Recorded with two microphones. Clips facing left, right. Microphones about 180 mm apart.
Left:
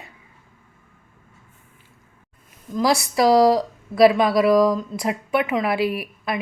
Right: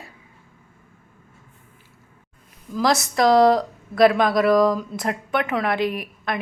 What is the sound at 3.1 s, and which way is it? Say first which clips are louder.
Speech: even; 5° left (ahead or behind).